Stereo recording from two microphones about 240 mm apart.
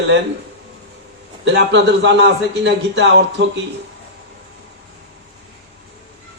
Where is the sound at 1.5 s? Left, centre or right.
Right.